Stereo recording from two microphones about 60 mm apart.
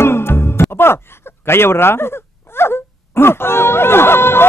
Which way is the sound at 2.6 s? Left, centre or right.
Left.